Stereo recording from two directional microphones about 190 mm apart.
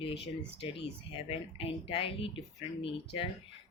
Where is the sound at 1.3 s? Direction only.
30° left (ahead or behind).